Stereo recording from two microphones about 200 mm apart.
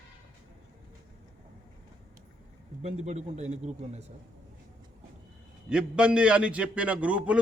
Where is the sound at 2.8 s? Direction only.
30° right (ahead or behind).